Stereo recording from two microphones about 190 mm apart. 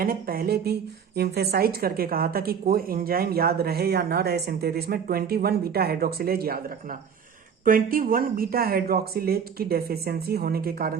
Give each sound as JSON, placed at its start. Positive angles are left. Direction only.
{"t": 0.0, "sound": "a woman's voice", "side_deg": -50}
{"t": 7.6, "sound": "a woman's voice", "side_deg": -45}